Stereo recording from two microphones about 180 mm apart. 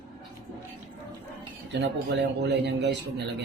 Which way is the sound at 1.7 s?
75° right (ahead or behind).